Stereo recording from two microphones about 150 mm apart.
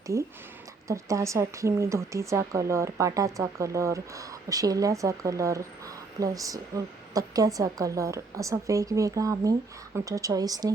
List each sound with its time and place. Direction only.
0.9 s speech: 20° right (ahead or behind)